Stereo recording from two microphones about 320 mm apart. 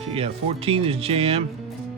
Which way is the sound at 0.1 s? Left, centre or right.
Centre.